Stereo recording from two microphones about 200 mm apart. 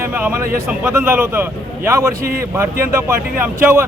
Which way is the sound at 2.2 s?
50° right (ahead or behind).